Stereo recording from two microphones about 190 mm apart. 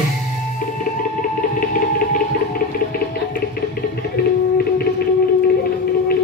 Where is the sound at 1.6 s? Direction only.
45° left (ahead or behind).